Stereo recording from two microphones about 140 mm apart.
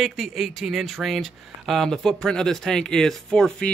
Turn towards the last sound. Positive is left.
turn(degrees=5)  # may be behind; listen again after turning